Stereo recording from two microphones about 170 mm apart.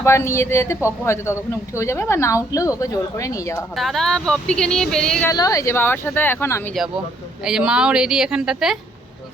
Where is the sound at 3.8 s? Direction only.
Centre (ahead or behind).